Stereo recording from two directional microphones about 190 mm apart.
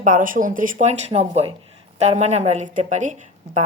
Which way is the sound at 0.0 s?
45° right (ahead or behind).